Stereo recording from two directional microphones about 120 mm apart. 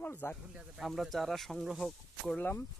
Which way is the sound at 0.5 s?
5° right (ahead or behind).